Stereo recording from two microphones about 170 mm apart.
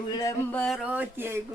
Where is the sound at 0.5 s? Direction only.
Centre (ahead or behind).